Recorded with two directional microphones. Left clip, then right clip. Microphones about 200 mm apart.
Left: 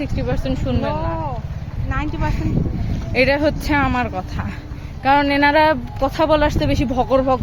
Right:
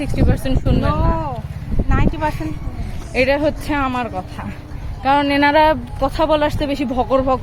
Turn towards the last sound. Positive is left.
turn(degrees=0)  # may be behind; listen again after turning